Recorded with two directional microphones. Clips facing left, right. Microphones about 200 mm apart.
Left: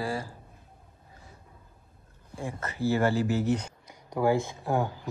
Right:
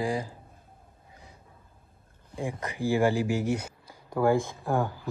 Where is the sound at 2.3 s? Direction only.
15° right (ahead or behind).